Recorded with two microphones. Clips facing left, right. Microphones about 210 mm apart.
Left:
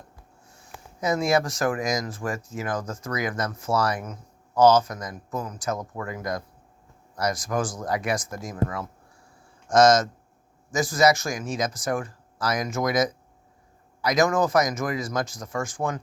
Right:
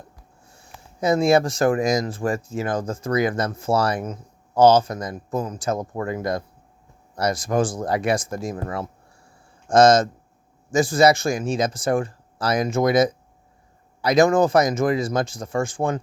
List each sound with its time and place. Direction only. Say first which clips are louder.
0.9 s speech: right 5 dB; 30° right (ahead or behind)